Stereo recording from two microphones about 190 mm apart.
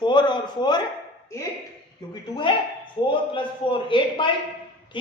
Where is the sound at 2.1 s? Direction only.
25° left (ahead or behind).